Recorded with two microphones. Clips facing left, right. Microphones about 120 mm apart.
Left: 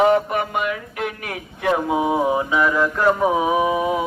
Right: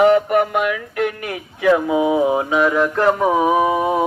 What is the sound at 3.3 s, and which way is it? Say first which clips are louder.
Mantra: right 3 dB; 50° right (ahead or behind).